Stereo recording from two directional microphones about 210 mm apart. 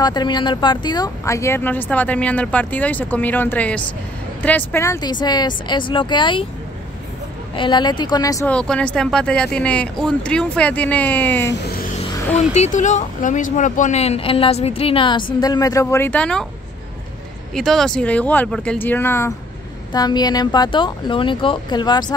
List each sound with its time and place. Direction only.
0.0 s speech: 20° left (ahead or behind)
7.5 s speech: 20° left (ahead or behind)
8.5 s speech: 5° left (ahead or behind)
12.4 s speech: 35° left (ahead or behind); by 16.4 s 5° left (ahead or behind)
17.6 s speech: centre (ahead or behind); by 22.1 s 20° left (ahead or behind)